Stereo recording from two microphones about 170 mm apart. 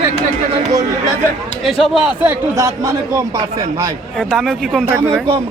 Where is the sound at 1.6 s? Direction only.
Centre (ahead or behind).